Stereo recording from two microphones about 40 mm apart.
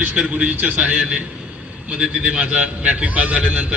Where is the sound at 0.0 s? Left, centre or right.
Right.